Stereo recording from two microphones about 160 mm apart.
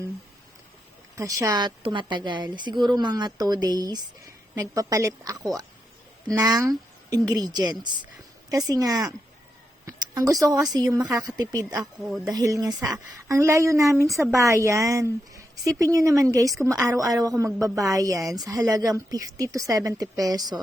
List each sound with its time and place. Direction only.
1.1 s a woman's voice: 20° right (ahead or behind)
11.9 s speech: 5° right (ahead or behind)
12.3 s a woman's voice: 20° right (ahead or behind)